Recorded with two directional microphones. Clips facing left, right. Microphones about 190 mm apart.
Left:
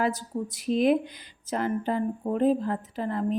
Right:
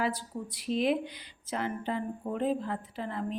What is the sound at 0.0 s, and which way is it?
A woman's voice, 45° left (ahead or behind).